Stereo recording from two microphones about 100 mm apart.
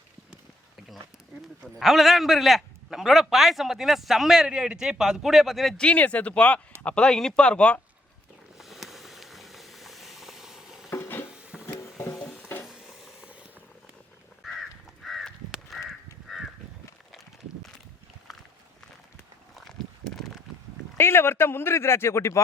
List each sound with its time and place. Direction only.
1.6 s a man's voice: centre (ahead or behind)
8.5 s a sound: centre (ahead or behind)
10.8 s stir: 25° left (ahead or behind)
11.3 s music: 10° right (ahead or behind)
11.6 s music: 25° left (ahead or behind)
12.6 s a sound: 5° right (ahead or behind)
14.4 s crow: centre (ahead or behind)
21.0 s a man's voice: 25° left (ahead or behind)